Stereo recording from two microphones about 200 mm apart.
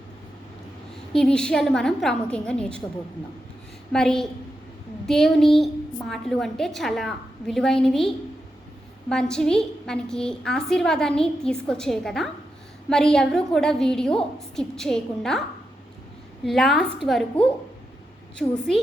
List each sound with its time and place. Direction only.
1.1 s a woman's voice: 5° left (ahead or behind)
3.9 s a woman's voice: centre (ahead or behind)
16.5 s a woman's voice: centre (ahead or behind)